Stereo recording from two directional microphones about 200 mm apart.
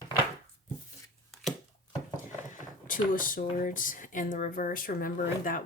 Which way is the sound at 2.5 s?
40° left (ahead or behind).